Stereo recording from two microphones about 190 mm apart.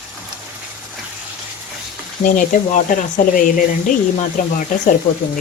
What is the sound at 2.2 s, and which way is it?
Speech, 45° left (ahead or behind).